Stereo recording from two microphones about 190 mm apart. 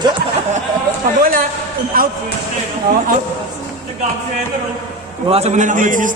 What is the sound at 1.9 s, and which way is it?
Speech, 50° right (ahead or behind).